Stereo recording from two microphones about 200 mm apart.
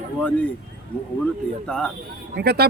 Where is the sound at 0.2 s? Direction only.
5° left (ahead or behind).